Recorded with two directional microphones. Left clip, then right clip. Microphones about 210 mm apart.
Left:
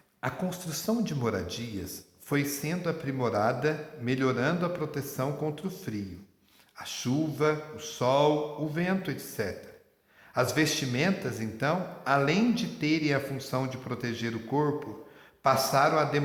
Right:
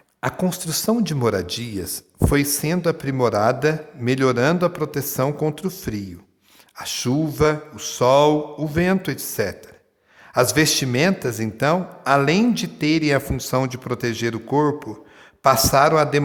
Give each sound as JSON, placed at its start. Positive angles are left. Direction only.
{"t": 0.2, "sound": "speech", "side_deg": -50}